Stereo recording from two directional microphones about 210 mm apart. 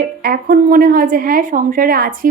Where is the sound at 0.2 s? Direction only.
45° right (ahead or behind).